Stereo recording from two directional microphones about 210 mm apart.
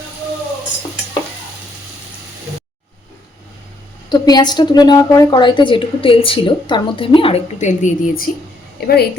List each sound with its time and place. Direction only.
4.1 s a woman's voice: 20° left (ahead or behind); by 9.0 s 50° left (ahead or behind)